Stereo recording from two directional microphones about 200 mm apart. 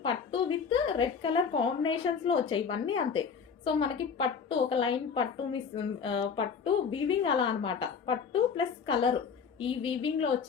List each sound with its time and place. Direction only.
0.0 s a woman's voice: 25° left (ahead or behind)